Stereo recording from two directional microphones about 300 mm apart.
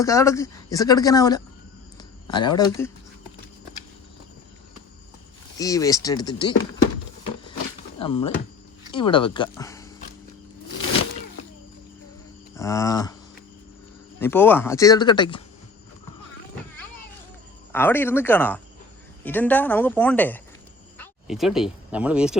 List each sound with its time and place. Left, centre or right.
0.0 s speech: centre
5.5 s speech: centre
7.9 s speech: centre
12.5 s a sound: centre
14.2 s speech: centre
17.7 s a woman's voice: centre